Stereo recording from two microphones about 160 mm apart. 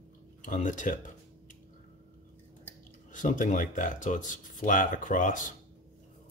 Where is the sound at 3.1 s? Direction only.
50° left (ahead or behind).